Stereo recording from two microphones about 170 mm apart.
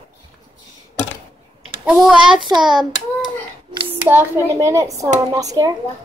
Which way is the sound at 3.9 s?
15° right (ahead or behind).